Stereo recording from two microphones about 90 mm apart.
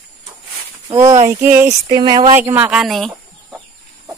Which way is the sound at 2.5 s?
15° right (ahead or behind).